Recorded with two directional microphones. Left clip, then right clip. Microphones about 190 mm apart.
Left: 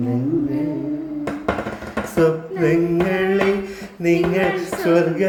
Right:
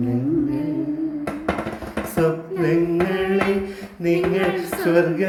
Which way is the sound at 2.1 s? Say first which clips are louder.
Left 3 dB; 15° left (ahead or behind).